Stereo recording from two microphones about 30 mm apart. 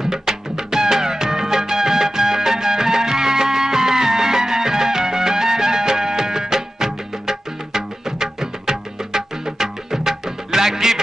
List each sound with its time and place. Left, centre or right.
0.0 s music: centre